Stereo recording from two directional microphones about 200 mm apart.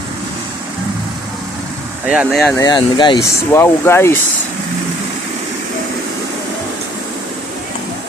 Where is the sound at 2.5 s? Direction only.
20° left (ahead or behind).